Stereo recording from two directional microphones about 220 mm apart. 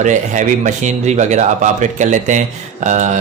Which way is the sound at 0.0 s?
35° right (ahead or behind).